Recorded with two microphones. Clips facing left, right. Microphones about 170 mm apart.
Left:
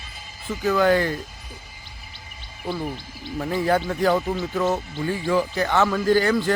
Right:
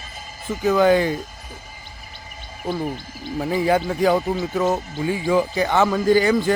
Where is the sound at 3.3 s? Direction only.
10° right (ahead or behind).